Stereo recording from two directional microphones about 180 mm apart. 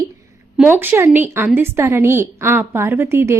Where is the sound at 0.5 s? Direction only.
10° right (ahead or behind).